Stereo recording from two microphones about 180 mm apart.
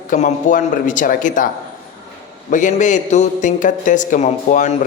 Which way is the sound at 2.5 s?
45° left (ahead or behind).